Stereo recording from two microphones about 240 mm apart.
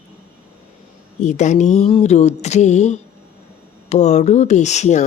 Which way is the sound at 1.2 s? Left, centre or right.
Left.